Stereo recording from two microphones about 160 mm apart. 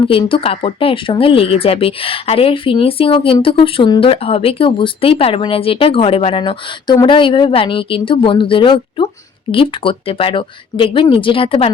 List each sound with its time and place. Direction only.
0.0 s speech: 35° left (ahead or behind)